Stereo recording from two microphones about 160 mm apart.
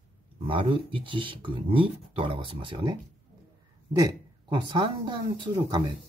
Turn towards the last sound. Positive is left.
turn(degrees=-30)  # may be behind; listen again after turning